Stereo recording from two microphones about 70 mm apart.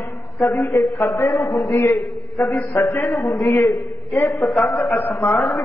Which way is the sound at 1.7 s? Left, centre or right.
Left.